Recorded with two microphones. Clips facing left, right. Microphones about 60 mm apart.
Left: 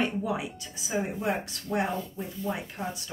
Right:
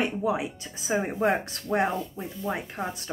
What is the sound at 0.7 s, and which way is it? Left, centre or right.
A woman's voice, right.